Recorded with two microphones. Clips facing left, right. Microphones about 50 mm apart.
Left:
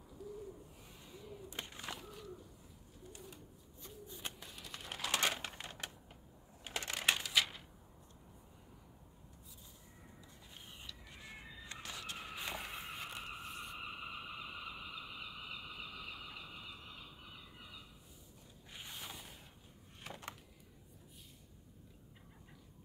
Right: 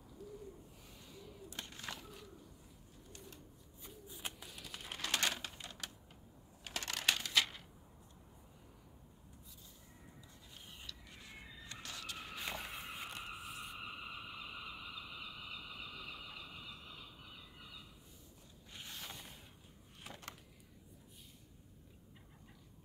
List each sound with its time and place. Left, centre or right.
1.0 s a sound: centre
1.8 s bird: centre
3.8 s bird: centre
5.0 s typewriter: left
6.6 s crushing: left
7.3 s typewriter: centre
10.8 s crow: centre
11.7 s a sound: centre
12.2 s vehicle: centre
13.8 s vehicle: centre
18.7 s a sound: centre